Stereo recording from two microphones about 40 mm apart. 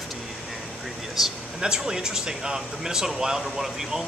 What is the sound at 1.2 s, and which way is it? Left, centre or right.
Speech, centre.